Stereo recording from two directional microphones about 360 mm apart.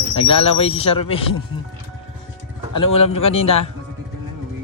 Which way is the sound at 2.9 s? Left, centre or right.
Centre.